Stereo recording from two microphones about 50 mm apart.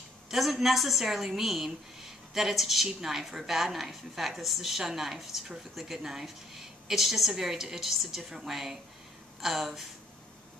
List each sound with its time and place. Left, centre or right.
0.3 s a woman's voice: centre